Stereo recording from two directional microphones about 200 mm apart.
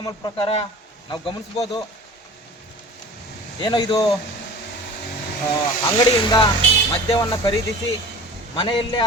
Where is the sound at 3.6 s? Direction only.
20° left (ahead or behind).